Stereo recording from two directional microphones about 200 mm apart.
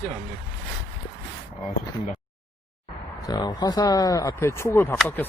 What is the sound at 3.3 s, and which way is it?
Speech, 20° left (ahead or behind).